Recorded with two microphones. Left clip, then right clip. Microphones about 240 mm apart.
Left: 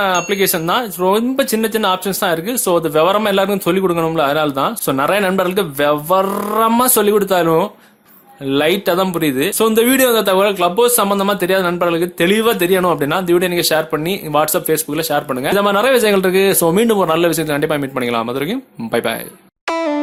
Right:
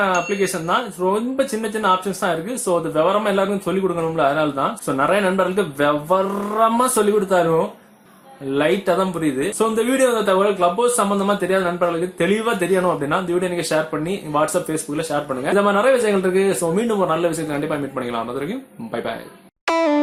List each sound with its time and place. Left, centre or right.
0.0 s speech: left
19.6 s music: centre